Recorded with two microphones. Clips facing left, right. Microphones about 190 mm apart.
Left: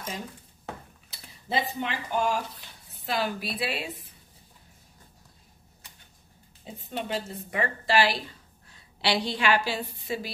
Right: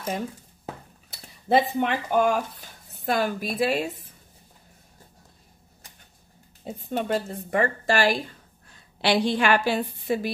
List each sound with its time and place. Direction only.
1.5 s speech: 55° right (ahead or behind)
6.6 s a woman's voice: 50° right (ahead or behind)